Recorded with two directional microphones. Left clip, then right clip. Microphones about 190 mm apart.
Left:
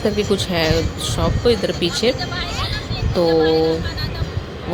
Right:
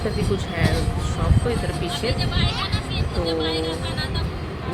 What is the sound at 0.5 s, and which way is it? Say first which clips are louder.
Speech: left 6 dB; 35° left (ahead or behind).